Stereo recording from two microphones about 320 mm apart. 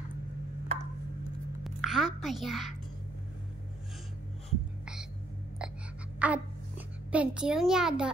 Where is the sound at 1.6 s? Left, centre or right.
Centre.